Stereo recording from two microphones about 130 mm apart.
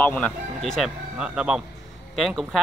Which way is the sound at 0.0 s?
10° left (ahead or behind).